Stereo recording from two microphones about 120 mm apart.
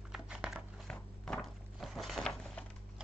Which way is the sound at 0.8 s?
10° left (ahead or behind).